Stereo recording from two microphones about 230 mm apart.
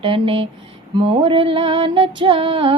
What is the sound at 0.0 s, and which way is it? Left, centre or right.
Music, right.